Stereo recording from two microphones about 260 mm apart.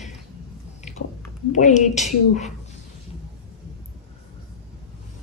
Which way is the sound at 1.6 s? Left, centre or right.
Left.